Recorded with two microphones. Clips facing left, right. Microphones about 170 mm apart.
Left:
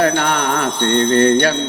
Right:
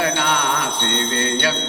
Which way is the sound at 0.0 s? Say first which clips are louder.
Left 4 dB; 45° left (ahead or behind).